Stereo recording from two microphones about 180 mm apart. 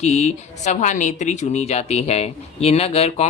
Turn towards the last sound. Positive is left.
turn(degrees=35)  # may be behind; listen again after turning